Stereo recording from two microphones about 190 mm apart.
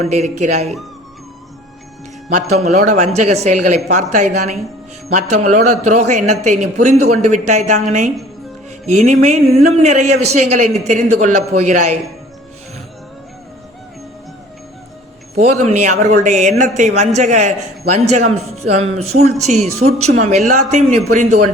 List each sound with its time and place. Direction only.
0.0 s speech: 35° right (ahead or behind)
2.6 s speech: 35° right (ahead or behind)
8.9 s speech: 35° right (ahead or behind)
15.4 s speech: 40° right (ahead or behind)